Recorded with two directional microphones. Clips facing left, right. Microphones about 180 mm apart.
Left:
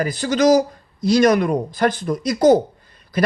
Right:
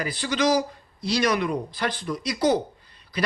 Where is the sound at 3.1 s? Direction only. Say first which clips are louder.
Left 8 dB; 45° left (ahead or behind).